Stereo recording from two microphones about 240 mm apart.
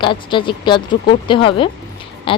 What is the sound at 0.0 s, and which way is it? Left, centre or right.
Speech, centre.